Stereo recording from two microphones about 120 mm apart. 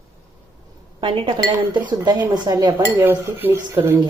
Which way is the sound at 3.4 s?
15° right (ahead or behind).